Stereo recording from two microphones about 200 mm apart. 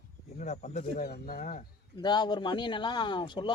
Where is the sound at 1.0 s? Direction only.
45° left (ahead or behind).